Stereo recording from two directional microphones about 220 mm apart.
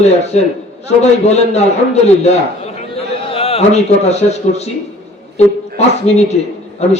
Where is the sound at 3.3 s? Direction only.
25° left (ahead or behind).